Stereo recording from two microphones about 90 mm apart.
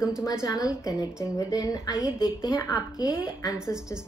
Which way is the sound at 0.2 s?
35° left (ahead or behind).